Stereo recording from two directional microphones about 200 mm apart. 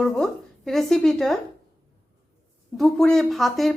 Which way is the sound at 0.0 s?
Centre (ahead or behind).